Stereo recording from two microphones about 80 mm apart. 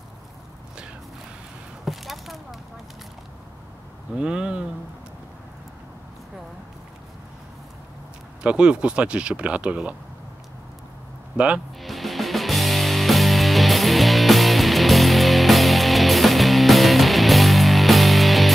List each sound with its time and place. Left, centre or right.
1.9 s a sound: centre
4.2 s speech: centre
8.4 s speech: centre
11.3 s speech: centre
11.8 s music: centre